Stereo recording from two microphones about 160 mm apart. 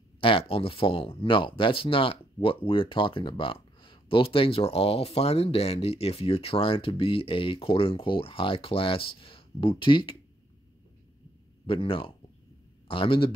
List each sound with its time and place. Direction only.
0.2 s speech: 35° left (ahead or behind)
11.6 s a man's voice: 35° left (ahead or behind)